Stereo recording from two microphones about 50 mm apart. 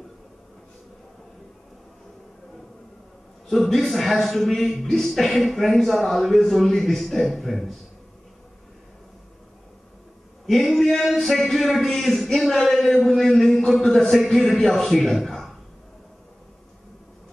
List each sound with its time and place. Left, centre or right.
3.4 s a man's voice: centre
10.7 s male singing: centre
11.1 s a man's voice: centre